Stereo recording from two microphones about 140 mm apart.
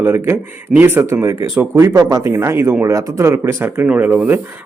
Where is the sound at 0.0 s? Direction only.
15° right (ahead or behind).